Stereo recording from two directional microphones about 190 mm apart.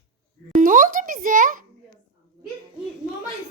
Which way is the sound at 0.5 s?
45° right (ahead or behind).